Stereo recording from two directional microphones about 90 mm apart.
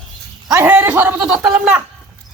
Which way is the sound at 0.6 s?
20° right (ahead or behind).